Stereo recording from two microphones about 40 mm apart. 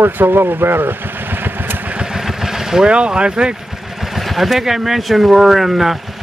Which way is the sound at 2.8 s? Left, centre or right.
Right.